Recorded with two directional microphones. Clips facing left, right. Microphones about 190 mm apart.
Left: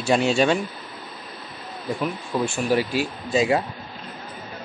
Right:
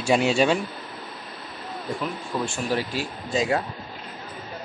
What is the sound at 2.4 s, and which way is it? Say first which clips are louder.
Speech: left 5 dB; 5° left (ahead or behind).